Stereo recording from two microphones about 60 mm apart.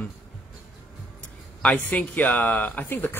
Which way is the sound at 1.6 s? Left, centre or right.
Centre.